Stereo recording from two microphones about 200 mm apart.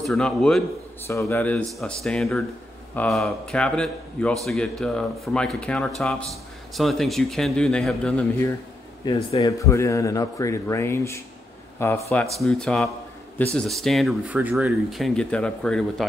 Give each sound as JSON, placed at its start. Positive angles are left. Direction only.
{"t": 0.0, "sound": "speech", "side_deg": 0}
{"t": 1.0, "sound": "speech", "side_deg": 15}
{"t": 9.0, "sound": "speech", "side_deg": 20}